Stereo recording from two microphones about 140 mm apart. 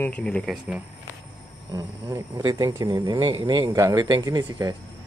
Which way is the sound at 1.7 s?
25° right (ahead or behind).